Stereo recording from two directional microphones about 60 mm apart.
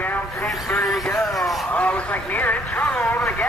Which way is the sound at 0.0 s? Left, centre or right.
Left.